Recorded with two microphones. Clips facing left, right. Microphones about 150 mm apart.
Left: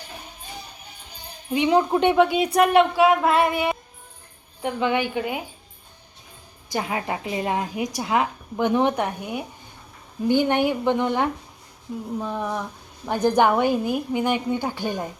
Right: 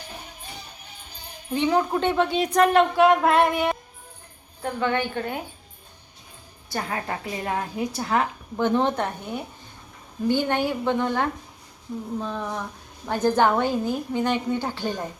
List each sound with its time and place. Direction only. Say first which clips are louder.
1.5 s a woman's voice: left 3 dB; 15° left (ahead or behind)
6.7 s a woman's voice: left 3 dB; 15° left (ahead or behind)